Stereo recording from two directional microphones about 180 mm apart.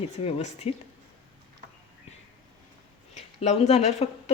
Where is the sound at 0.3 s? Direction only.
40° left (ahead or behind).